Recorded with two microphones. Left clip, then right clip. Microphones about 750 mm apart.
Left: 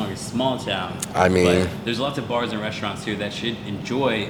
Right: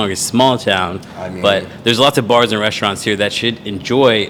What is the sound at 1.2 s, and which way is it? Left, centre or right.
Speech, left.